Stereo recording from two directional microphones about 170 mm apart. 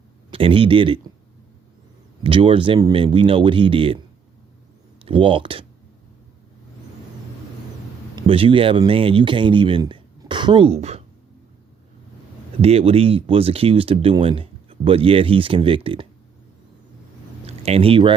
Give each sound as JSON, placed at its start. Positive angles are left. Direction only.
{"t": 0.3, "sound": "speech", "side_deg": -30}
{"t": 2.2, "sound": "speech", "side_deg": -30}
{"t": 5.0, "sound": "speech", "side_deg": -30}
{"t": 8.1, "sound": "speech", "side_deg": -30}
{"t": 12.6, "sound": "speech", "side_deg": -35}
{"t": 17.4, "sound": "speech", "side_deg": -35}